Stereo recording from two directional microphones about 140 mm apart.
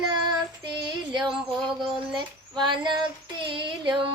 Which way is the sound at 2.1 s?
35° right (ahead or behind).